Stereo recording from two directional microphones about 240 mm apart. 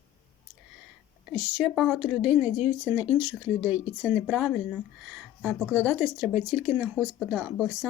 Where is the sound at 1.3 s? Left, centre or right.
Centre.